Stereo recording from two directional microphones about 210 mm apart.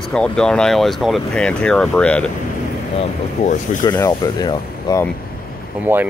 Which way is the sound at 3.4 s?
35° left (ahead or behind).